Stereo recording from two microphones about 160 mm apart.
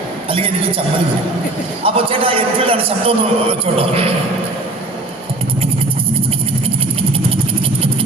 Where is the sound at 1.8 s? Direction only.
35° right (ahead or behind).